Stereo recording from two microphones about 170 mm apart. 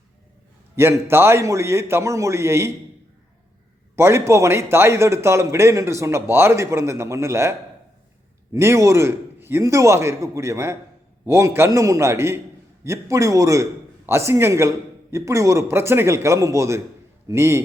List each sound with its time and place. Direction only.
0.8 s a man's voice: 15° right (ahead or behind)
3.9 s a man's voice: 15° right (ahead or behind)
8.5 s a man's voice: 15° right (ahead or behind)